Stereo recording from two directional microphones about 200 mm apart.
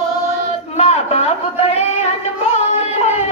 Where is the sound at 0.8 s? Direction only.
30° left (ahead or behind).